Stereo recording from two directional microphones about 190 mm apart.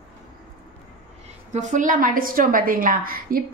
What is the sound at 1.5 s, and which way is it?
A woman's voice, 40° right (ahead or behind).